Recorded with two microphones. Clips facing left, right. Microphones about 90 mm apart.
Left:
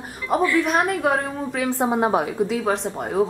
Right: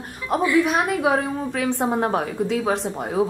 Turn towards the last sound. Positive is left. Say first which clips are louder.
# even
turn(degrees=0)  # may be behind; listen again after turning